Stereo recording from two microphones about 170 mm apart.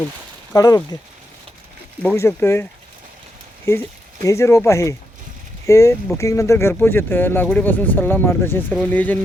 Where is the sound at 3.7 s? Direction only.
15° left (ahead or behind).